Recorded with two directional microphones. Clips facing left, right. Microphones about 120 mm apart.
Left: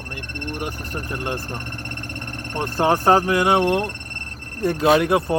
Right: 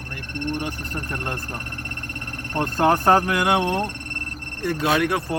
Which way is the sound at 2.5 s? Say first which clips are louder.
Even; 5° left (ahead or behind).